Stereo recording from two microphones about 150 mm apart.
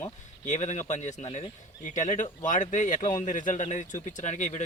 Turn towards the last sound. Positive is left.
turn(degrees=50)  # may be behind; listen again after turning